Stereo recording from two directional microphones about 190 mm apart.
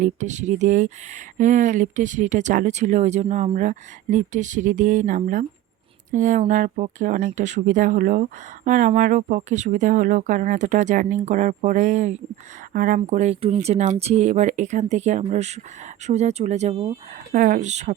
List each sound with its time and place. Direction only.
0.0 s speech: 40° right (ahead or behind)
13.0 s speech: 35° right (ahead or behind)